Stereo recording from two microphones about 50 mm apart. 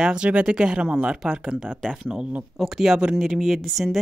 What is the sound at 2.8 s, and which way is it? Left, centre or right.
Speech, centre.